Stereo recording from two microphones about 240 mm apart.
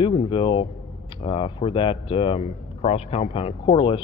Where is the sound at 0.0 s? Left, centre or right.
Left.